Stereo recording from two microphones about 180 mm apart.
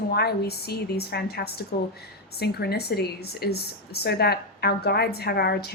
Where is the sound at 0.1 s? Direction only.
65° left (ahead or behind).